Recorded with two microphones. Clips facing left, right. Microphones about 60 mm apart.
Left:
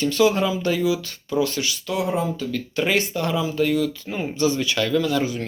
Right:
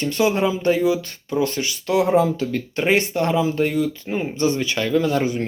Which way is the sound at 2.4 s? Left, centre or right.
Right.